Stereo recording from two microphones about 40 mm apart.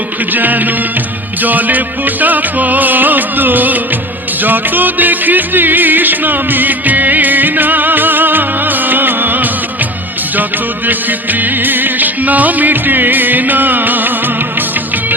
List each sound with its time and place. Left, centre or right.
0.3 s music: right
10.8 s music: right